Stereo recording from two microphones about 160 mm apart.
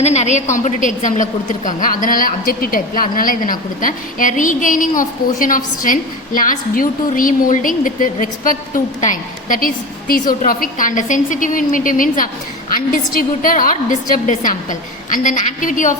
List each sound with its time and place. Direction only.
0.0 s a woman's voice: 45° left (ahead or behind)